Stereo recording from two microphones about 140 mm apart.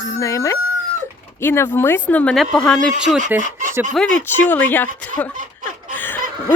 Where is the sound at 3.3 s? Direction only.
15° right (ahead or behind).